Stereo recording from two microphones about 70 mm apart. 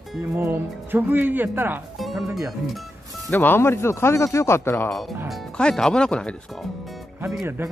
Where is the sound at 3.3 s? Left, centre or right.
Left.